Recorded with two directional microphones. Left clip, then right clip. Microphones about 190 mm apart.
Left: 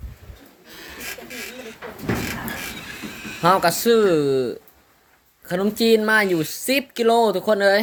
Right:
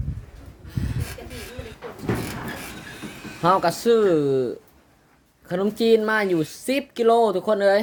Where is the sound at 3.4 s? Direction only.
10° right (ahead or behind).